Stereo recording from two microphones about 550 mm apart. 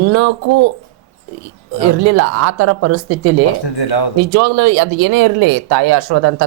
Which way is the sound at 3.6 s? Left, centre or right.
Left.